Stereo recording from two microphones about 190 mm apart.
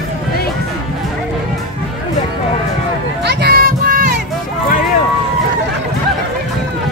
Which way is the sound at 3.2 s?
60° right (ahead or behind).